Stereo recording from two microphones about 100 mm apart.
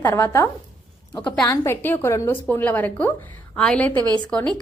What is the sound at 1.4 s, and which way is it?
A woman's voice, 30° left (ahead or behind).